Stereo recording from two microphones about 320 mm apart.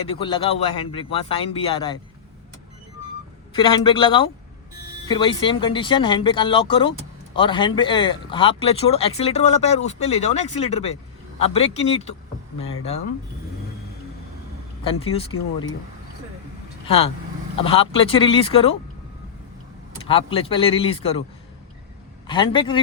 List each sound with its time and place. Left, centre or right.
0.1 s speech: centre
3.5 s speech: centre
14.8 s speech: centre
16.8 s speech: centre
20.1 s speech: centre
22.3 s speech: centre